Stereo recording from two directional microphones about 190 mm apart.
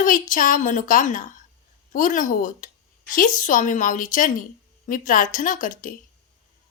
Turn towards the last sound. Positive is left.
turn(degrees=45)  # may be behind; listen again after turning